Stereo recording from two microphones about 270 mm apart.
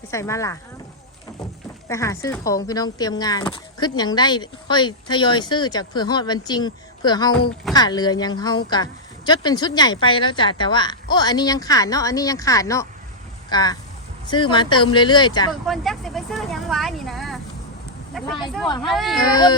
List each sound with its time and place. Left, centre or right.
0.1 s speech: centre
1.9 s speech: centre
15.6 s a sound: centre
18.1 s speech: centre
19.2 s speech: centre